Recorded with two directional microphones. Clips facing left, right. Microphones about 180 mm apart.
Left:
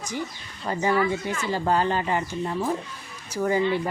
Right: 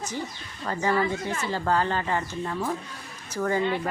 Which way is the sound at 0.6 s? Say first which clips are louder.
Left 2 dB; 15° left (ahead or behind).